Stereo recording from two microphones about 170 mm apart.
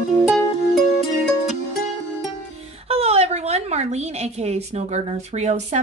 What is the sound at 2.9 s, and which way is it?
A woman's voice, 35° right (ahead or behind).